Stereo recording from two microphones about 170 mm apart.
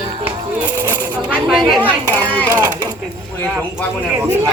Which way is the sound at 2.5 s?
20° right (ahead or behind).